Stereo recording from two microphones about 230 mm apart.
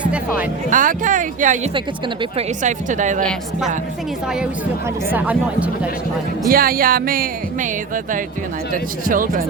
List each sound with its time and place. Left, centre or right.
0.0 s speech: centre
0.7 s speech: right
5.1 s speech: centre
6.5 s speech: right
8.7 s speech: right